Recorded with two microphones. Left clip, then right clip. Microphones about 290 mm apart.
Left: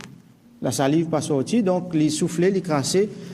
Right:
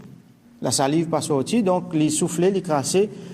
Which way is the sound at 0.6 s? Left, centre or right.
Centre.